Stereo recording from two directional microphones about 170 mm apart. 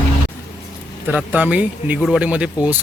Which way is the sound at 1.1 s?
10° right (ahead or behind).